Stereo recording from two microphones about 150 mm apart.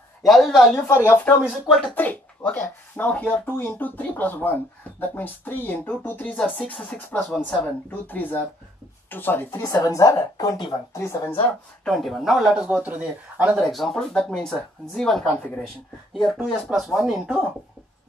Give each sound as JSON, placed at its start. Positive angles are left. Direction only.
{"t": 0.2, "sound": "speech", "side_deg": 0}
{"t": 0.8, "sound": "speech", "side_deg": 15}
{"t": 1.7, "sound": "speech", "side_deg": 5}
{"t": 7.9, "sound": "speech", "side_deg": 10}
{"t": 9.6, "sound": "a woman's voice", "side_deg": 25}
{"t": 11.8, "sound": "speech", "side_deg": 0}
{"t": 13.6, "sound": "speech", "side_deg": 0}